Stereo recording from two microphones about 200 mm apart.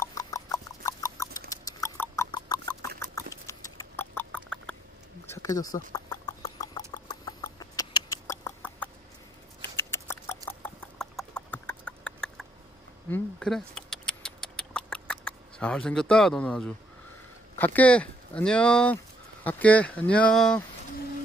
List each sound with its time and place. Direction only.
0.0 s rodents: 15° left (ahead or behind)
5.3 s a sound: 15° left (ahead or behind)
6.6 s rodents: 20° left (ahead or behind)
9.6 s patter: 15° left (ahead or behind)
10.6 s horse: 5° left (ahead or behind)
13.1 s vehicle: 5° left (ahead or behind)
17.6 s speech: 10° left (ahead or behind)